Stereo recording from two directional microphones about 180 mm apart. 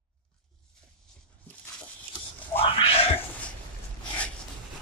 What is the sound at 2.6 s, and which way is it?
Music, 30° left (ahead or behind).